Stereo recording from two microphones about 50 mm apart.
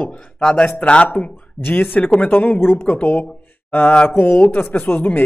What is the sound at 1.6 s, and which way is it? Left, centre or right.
Speech, left.